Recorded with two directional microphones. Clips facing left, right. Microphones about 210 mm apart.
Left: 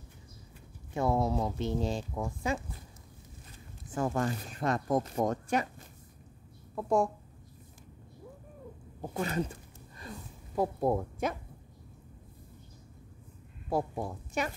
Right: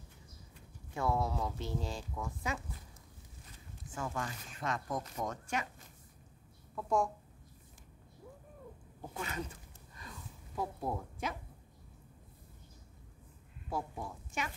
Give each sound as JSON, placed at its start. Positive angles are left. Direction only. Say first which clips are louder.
{"t": 0.9, "sound": "speech", "louder": "left 5 dB", "side_deg": 20}
{"t": 2.1, "sound": "speech", "louder": "left 6 dB", "side_deg": 35}
{"t": 3.9, "sound": "a woman's voice", "louder": "left 9 dB", "side_deg": 40}
{"t": 9.0, "sound": "a sound", "louder": "left 8 dB", "side_deg": 40}
{"t": 13.7, "sound": "speech", "louder": "left 8 dB", "side_deg": 35}